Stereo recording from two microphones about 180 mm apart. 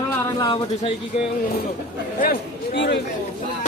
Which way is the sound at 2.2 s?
65° left (ahead or behind).